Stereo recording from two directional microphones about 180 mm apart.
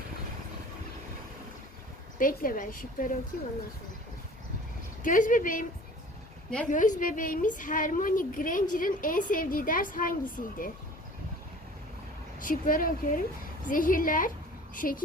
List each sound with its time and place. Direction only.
2.1 s a woman's voice: 50° left (ahead or behind)
5.0 s a woman's voice: 45° left (ahead or behind)
6.7 s a woman's voice: 45° left (ahead or behind)
12.4 s a woman's voice: 50° left (ahead or behind)